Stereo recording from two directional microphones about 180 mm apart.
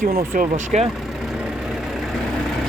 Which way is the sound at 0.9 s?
Centre (ahead or behind).